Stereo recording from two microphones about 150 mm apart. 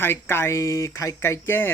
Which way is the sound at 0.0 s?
15° left (ahead or behind).